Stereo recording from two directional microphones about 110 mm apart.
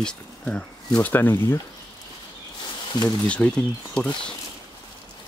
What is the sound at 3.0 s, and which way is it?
Speech, 10° left (ahead or behind).